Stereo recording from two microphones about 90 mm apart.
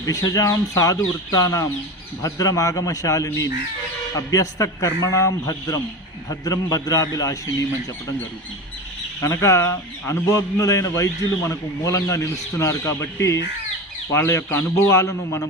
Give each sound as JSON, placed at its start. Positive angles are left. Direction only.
{"t": 0.0, "sound": "speech", "side_deg": 40}
{"t": 9.2, "sound": "a man's voice", "side_deg": 30}